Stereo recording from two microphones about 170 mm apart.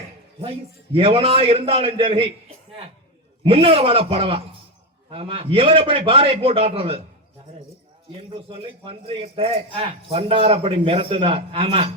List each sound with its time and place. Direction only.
0.9 s a man's voice: 35° right (ahead or behind)
3.4 s a man's voice: 35° right (ahead or behind)
8.2 s a man's voice: 35° right (ahead or behind)